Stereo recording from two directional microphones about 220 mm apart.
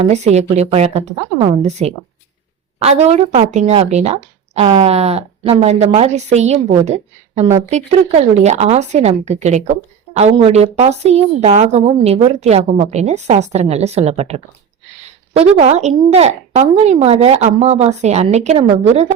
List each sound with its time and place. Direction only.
0.0 s a woman's voice: 30° right (ahead or behind)